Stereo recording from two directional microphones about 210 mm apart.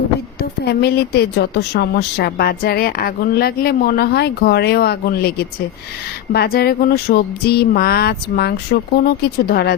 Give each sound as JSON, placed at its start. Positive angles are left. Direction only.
{"t": 0.6, "sound": "a woman's voice", "side_deg": 50}